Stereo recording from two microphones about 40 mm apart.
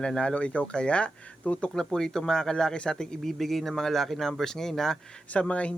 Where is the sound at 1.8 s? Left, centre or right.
Centre.